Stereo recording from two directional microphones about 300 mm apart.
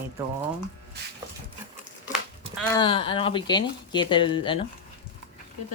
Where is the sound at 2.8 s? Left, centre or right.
Centre.